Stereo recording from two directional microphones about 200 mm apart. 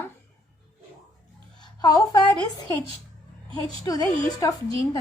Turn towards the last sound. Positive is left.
turn(degrees=20)  # may be behind; listen again after turning